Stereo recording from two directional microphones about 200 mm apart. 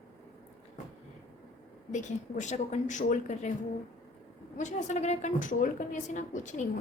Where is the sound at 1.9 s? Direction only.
35° left (ahead or behind).